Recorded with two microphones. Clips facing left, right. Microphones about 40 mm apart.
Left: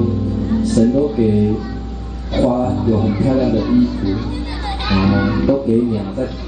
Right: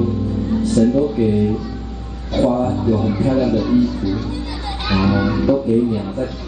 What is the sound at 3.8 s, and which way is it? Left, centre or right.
Speech, centre.